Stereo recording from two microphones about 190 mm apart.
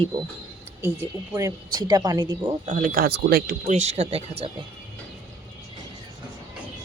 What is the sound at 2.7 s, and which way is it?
Speech, 45° right (ahead or behind).